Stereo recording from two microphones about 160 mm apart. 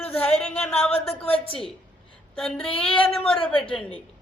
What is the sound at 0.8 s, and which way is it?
Speech, 40° left (ahead or behind).